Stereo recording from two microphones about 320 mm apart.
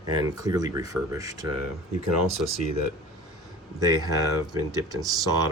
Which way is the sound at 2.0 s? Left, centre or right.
Right.